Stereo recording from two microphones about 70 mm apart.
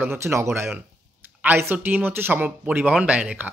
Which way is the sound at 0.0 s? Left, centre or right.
Right.